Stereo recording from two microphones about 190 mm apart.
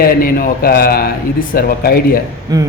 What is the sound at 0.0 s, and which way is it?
Speech, 50° left (ahead or behind).